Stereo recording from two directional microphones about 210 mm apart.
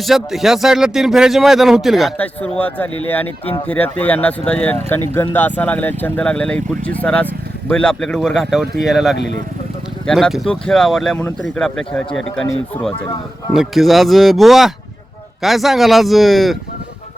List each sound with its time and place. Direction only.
0.0 s a man's voice: centre (ahead or behind)
13.5 s a man's voice: centre (ahead or behind)